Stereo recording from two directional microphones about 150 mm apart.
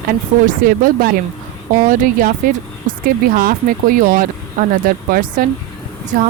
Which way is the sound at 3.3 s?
70° right (ahead or behind).